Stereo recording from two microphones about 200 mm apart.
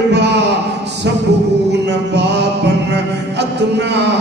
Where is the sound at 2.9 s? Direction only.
60° right (ahead or behind).